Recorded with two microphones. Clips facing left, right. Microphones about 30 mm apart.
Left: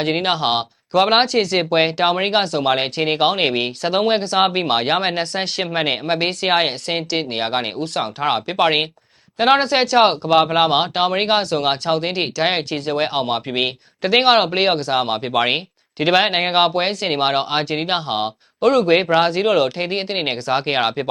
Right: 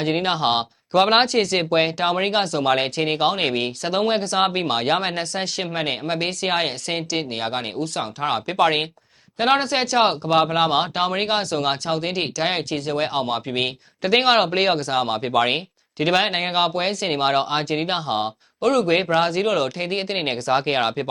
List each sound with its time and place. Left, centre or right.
0.0 s speech: left
0.5 s speech: centre
1.7 s speech: left